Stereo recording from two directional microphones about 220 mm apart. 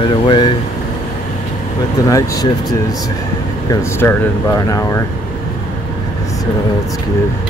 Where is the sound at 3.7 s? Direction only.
10° left (ahead or behind).